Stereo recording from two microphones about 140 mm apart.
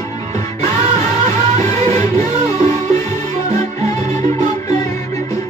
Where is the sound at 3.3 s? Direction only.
25° left (ahead or behind).